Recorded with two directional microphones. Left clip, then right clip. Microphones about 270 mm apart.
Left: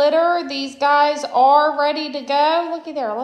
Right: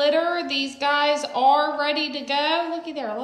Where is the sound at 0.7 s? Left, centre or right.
Left.